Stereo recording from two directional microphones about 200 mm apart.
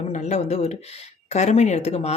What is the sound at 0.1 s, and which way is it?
Speech, 35° left (ahead or behind).